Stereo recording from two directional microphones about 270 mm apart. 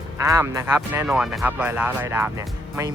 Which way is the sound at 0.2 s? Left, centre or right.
Centre.